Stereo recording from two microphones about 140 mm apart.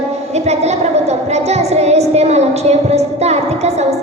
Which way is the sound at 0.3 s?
50° right (ahead or behind).